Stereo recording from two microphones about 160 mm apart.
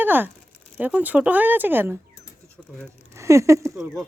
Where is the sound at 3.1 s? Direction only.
20° right (ahead or behind).